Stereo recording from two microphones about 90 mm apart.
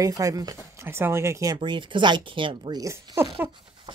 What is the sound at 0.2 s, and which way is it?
Speech, 40° right (ahead or behind).